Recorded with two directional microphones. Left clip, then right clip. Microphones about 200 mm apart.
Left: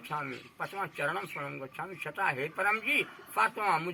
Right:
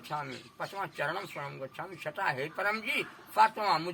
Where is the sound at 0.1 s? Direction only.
15° right (ahead or behind).